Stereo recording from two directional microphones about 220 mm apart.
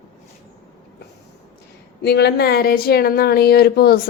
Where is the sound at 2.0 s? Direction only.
50° left (ahead or behind).